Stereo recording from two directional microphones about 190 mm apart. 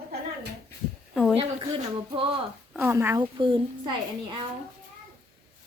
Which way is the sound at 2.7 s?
5° right (ahead or behind).